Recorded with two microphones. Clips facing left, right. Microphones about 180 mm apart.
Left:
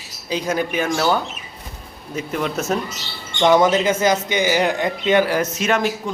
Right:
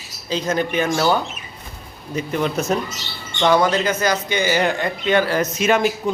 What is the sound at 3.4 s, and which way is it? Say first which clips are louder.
A man's voice: left 2 dB; 20° left (ahead or behind).